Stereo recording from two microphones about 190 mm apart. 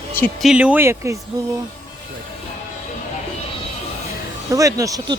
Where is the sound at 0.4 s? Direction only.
5° right (ahead or behind).